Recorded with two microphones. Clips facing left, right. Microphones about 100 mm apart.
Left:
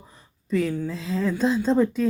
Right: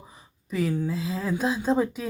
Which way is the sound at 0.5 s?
5° right (ahead or behind).